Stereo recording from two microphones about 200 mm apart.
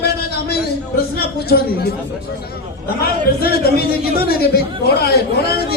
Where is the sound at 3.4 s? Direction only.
50° left (ahead or behind).